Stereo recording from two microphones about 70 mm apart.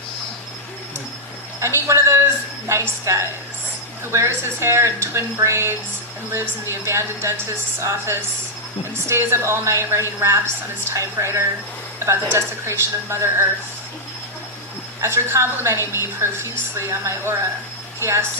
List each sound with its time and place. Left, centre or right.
1.6 s a woman's voice: right
15.0 s a woman's voice: right
15.8 s a woman's voice: left
16.4 s a woman's voice: right